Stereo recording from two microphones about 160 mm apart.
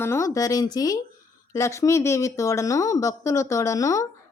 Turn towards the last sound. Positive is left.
turn(degrees=20)  # may be behind; listen again after turning